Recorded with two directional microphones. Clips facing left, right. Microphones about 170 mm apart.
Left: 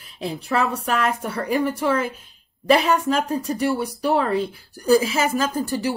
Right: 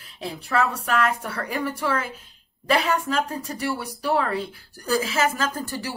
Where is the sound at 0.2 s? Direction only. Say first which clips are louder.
Left 1 dB; 20° left (ahead or behind).